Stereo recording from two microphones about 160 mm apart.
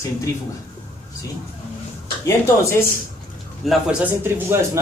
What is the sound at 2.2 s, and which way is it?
Speech, 20° left (ahead or behind).